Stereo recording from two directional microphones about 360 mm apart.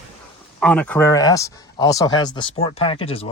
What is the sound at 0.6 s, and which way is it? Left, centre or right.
Speech, centre.